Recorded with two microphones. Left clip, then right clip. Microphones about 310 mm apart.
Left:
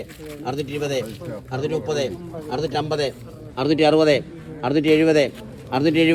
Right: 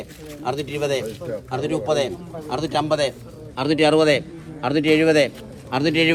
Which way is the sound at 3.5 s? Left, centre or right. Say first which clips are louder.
Even; right.